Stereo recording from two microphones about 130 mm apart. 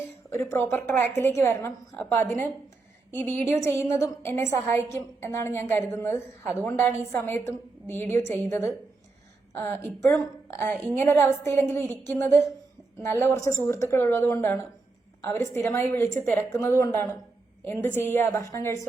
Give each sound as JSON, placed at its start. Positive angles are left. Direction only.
{"t": 0.5, "sound": "a woman's voice", "side_deg": 15}